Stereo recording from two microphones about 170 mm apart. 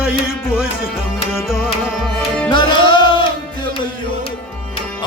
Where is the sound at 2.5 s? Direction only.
30° left (ahead or behind).